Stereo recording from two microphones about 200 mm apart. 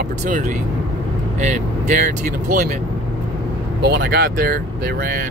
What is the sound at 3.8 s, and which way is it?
Speech, 55° right (ahead or behind).